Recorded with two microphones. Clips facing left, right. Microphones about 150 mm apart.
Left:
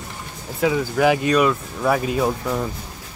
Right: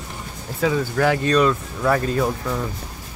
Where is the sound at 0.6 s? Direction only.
10° left (ahead or behind).